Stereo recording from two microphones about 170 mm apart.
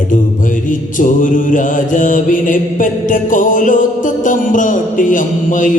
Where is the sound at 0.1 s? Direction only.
50° left (ahead or behind).